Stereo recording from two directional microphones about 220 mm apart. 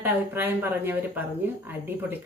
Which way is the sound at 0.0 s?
10° right (ahead or behind).